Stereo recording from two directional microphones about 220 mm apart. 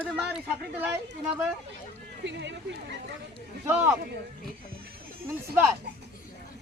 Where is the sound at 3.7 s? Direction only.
10° right (ahead or behind).